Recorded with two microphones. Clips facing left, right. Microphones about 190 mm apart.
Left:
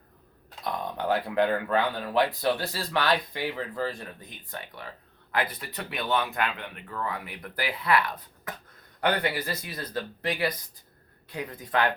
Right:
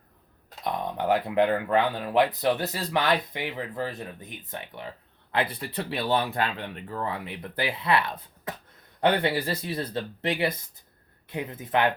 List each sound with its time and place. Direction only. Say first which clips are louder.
0.6 s speech: right 2 dB; 20° right (ahead or behind)